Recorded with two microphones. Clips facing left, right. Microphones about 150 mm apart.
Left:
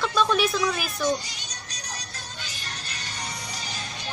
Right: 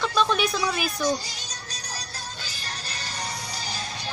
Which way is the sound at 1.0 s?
35° right (ahead or behind).